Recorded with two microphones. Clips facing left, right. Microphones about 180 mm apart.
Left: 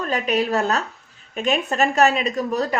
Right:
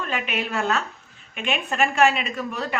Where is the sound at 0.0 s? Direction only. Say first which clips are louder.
Left 6 dB; 40° left (ahead or behind).